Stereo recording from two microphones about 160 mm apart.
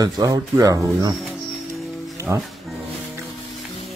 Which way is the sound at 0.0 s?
20° right (ahead or behind).